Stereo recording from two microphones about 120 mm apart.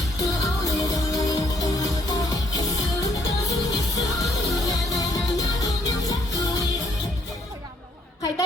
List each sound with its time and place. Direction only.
0.2 s music: 30° left (ahead or behind)